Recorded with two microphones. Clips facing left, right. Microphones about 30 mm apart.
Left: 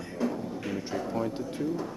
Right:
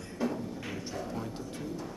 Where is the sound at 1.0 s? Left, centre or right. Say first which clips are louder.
Left 8 dB; centre.